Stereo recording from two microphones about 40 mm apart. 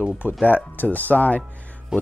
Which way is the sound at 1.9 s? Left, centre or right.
Centre.